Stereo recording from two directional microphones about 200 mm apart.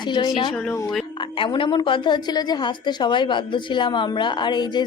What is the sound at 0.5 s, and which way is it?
Speech, 5° left (ahead or behind).